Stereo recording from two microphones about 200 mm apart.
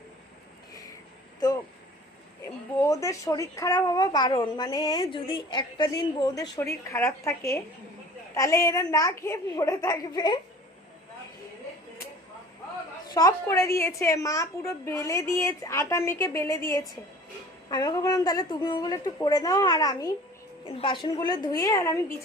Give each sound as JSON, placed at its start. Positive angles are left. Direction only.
{"t": 2.4, "sound": "a child's voice", "side_deg": 15}
{"t": 13.1, "sound": "a woman's voice", "side_deg": 15}